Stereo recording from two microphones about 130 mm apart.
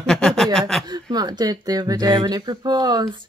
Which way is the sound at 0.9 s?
30° right (ahead or behind).